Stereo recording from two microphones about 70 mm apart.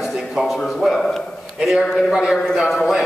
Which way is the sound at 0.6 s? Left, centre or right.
Centre.